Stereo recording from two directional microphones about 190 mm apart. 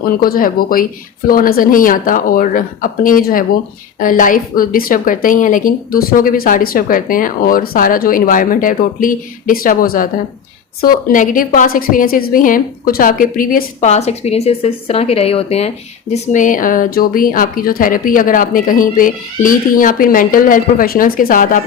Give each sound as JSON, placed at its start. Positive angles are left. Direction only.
{"t": 0.0, "sound": "speech", "side_deg": 50}
{"t": 16.3, "sound": "speech", "side_deg": 45}